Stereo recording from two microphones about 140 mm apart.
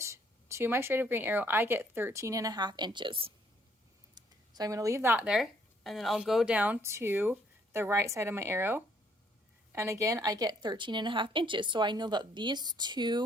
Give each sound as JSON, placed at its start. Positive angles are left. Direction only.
{"t": 0.0, "sound": "speech", "side_deg": -20}
{"t": 4.1, "sound": "a woman's voice", "side_deg": -25}